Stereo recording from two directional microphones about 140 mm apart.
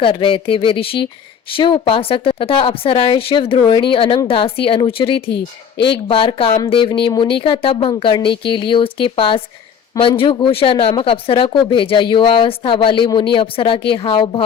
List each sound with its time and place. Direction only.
0.0 s speech: 40° left (ahead or behind)